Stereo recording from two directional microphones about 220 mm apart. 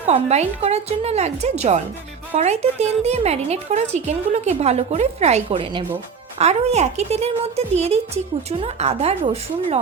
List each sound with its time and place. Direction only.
0.1 s speech: 30° right (ahead or behind)